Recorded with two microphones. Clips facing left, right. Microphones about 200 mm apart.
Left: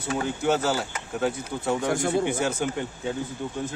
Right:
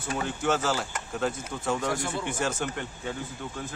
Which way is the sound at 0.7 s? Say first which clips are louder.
Left 2 dB; 5° left (ahead or behind).